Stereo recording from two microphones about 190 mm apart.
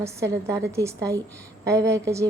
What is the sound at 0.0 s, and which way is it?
A woman's voice, 15° right (ahead or behind).